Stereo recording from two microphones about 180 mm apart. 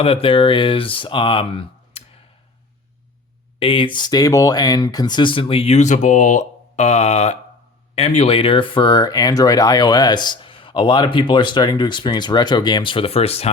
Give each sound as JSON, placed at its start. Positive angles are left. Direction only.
{"t": 0.0, "sound": "speech", "side_deg": 30}
{"t": 3.6, "sound": "speech", "side_deg": 30}